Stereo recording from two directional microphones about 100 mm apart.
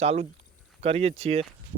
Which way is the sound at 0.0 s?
90° right.